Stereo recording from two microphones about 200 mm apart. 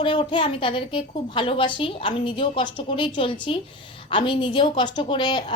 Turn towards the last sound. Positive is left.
turn(degrees=25)  # may be behind; listen again after turning